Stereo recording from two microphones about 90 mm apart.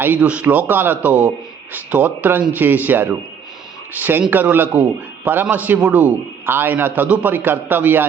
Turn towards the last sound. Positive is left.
turn(degrees=-20)  # may be behind; listen again after turning